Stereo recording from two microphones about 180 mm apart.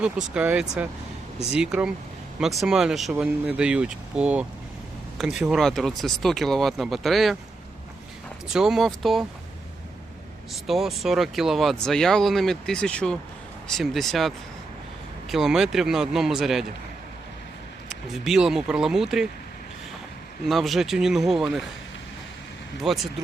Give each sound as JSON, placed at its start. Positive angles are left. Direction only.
{"t": 0.0, "sound": "speech", "side_deg": -5}
{"t": 8.5, "sound": "speech", "side_deg": -5}
{"t": 10.5, "sound": "speech", "side_deg": 0}
{"t": 17.8, "sound": "speech", "side_deg": 0}
{"t": 20.4, "sound": "speech", "side_deg": 0}
{"t": 22.8, "sound": "speech", "side_deg": 0}